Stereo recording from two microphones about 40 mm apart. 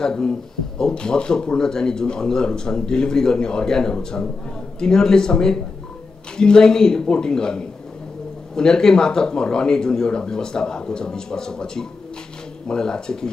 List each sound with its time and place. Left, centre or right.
0.0 s speech: centre